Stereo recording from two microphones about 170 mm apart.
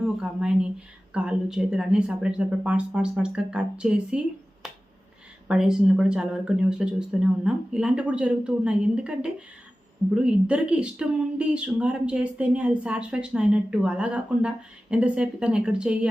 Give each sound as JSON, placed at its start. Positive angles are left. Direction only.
{"t": 0.0, "sound": "speech", "side_deg": -5}
{"t": 5.5, "sound": "speech", "side_deg": -5}